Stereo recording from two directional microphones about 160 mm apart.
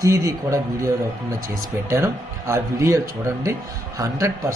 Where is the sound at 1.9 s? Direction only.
15° right (ahead or behind).